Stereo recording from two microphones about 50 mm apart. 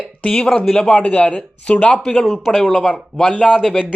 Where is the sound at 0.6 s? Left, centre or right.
Centre.